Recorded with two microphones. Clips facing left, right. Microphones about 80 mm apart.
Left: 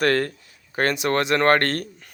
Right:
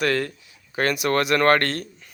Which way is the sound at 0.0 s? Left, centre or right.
Left.